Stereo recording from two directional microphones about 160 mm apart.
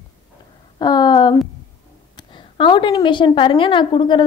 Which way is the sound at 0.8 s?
25° left (ahead or behind).